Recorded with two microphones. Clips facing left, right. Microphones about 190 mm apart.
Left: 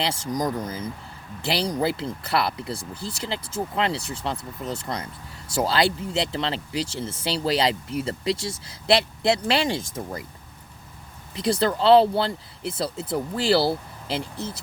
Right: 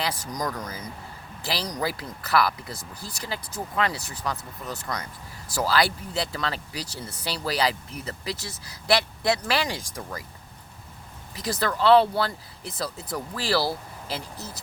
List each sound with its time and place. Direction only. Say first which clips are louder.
0.0 s speech: left 4 dB; 25° left (ahead or behind)
11.3 s speech: left 5 dB; 25° left (ahead or behind)